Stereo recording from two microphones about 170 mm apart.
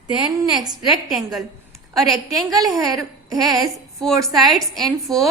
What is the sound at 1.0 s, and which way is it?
Speech, centre (ahead or behind).